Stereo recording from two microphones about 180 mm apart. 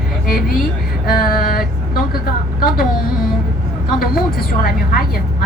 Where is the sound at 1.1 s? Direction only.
55° left (ahead or behind).